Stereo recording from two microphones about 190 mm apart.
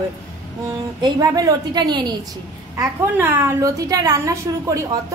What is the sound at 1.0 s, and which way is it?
A woman's voice, 20° right (ahead or behind).